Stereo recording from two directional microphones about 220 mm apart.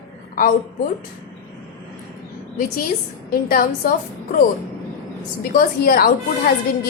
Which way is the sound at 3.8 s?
40° left (ahead or behind).